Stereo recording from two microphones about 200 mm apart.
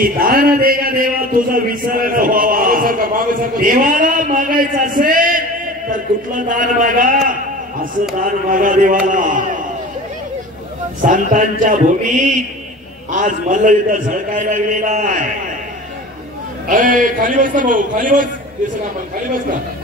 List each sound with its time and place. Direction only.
0.0 s a man's voice: 45° right (ahead or behind)
11.0 s a man's voice: 40° right (ahead or behind)
16.6 s a man's voice: 40° right (ahead or behind)